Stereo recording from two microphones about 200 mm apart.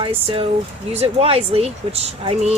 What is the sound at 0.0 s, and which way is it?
Speech, 25° right (ahead or behind).